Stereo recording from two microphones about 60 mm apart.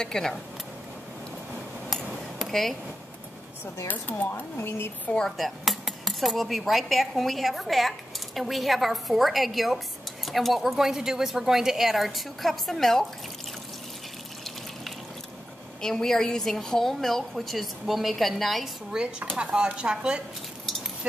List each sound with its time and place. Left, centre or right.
0.0 s speech: centre
2.0 s dishes: centre
3.8 s speech: left
5.4 s a woman's voice: centre
15.8 s a woman's voice: centre
18.9 s speech: centre